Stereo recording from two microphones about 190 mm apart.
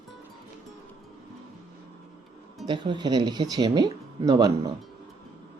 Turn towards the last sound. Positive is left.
turn(degrees=-20)  # may be behind; listen again after turning